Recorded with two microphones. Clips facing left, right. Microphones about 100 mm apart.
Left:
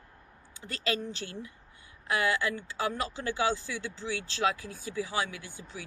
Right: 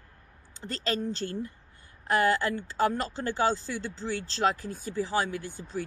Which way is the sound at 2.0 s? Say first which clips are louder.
Right 4 dB; 45° right (ahead or behind).